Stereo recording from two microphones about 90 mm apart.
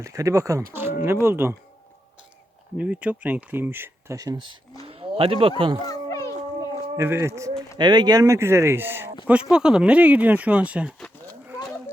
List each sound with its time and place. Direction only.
0.0 s speech: 35° right (ahead or behind)
0.7 s speech: 25° right (ahead or behind)
2.7 s speech: 15° right (ahead or behind)
4.9 s speech: 90° right
5.8 s a sound: 40° left (ahead or behind)
6.9 s speech: 30° right (ahead or behind)
7.8 s speech: 55° right (ahead or behind)
8.2 s speech: 30° right (ahead or behind)
9.2 s speech: 10° right (ahead or behind)